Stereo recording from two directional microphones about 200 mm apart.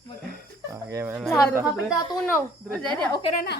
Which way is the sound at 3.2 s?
35° left (ahead or behind).